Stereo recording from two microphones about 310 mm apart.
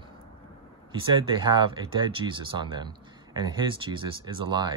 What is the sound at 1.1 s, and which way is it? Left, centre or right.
Speech, centre.